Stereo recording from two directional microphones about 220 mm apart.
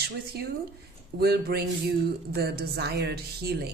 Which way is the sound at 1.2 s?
45° right (ahead or behind).